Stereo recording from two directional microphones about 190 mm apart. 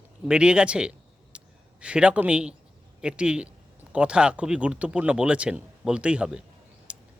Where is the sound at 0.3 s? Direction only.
5° right (ahead or behind).